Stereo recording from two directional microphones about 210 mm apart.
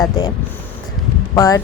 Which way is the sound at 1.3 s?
15° left (ahead or behind).